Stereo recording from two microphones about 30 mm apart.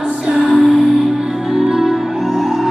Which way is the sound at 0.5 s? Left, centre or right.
Centre.